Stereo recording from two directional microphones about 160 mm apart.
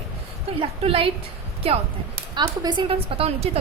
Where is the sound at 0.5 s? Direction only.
35° right (ahead or behind).